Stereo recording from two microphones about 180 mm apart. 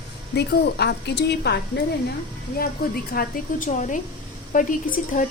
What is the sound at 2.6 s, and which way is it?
A woman's voice, 55° left (ahead or behind).